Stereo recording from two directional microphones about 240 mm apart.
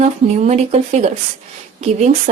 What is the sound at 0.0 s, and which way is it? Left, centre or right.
Speech, right.